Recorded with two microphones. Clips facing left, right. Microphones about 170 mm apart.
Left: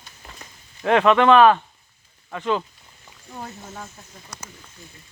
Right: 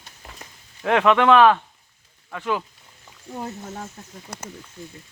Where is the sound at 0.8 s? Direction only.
5° right (ahead or behind).